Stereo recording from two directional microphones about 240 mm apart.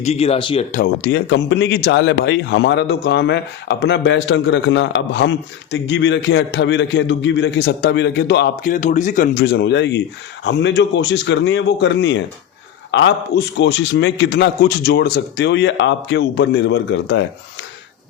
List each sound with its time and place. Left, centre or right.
0.0 s speech: left
0.7 s a man's voice: left